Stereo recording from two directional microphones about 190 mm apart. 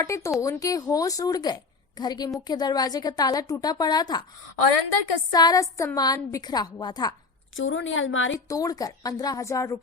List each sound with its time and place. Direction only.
0.0 s a woman's voice: 15° left (ahead or behind)
5.3 s a woman's voice: 20° left (ahead or behind)
7.5 s speech: 90° left
8.4 s a woman's voice: 20° left (ahead or behind)